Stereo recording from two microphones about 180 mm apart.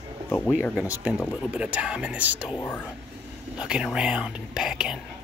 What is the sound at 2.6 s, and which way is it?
Speech, 10° left (ahead or behind).